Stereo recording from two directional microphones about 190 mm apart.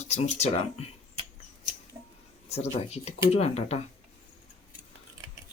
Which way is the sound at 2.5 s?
35° left (ahead or behind).